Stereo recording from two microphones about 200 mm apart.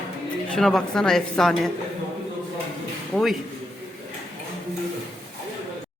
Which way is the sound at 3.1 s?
Centre (ahead or behind).